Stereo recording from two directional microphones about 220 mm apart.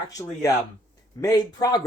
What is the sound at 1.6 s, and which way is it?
Speech, 15° left (ahead or behind).